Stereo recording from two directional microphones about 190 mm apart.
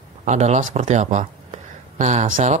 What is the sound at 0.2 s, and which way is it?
Speech, 35° right (ahead or behind).